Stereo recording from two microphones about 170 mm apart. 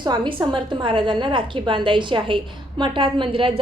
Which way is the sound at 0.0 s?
25° right (ahead or behind).